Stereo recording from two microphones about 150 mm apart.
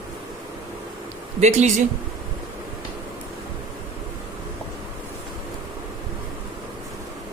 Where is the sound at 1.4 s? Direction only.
50° right (ahead or behind).